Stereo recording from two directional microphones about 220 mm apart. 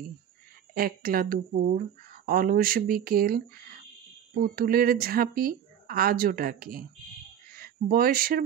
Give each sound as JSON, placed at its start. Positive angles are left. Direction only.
{"t": 0.7, "sound": "speech", "side_deg": -40}